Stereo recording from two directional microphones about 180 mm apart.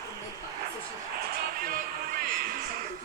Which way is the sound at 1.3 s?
55° right (ahead or behind).